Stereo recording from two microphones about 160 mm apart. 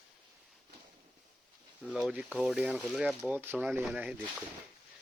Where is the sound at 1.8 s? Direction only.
5° right (ahead or behind).